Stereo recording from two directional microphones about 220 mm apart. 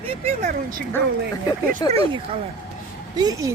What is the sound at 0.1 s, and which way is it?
Speech, 30° right (ahead or behind).